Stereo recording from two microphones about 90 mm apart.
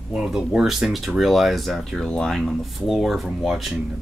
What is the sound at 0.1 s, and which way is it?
Speech, 5° right (ahead or behind).